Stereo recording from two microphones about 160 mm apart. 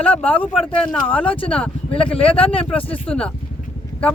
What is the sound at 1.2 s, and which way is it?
Speech, 35° left (ahead or behind).